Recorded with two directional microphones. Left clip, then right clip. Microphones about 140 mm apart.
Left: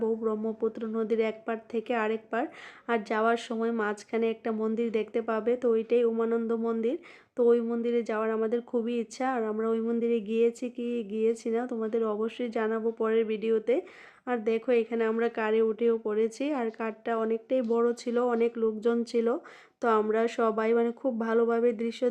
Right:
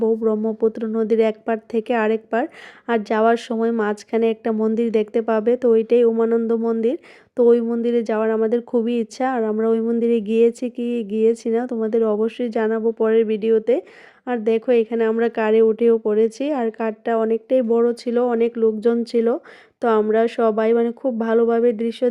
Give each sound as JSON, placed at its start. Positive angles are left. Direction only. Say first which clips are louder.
{"t": 0.0, "sound": "speech", "louder": "right 10 dB", "side_deg": -40}